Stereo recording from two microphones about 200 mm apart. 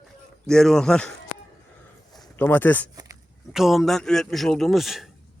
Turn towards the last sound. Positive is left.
turn(degrees=0)  # may be behind; listen again after turning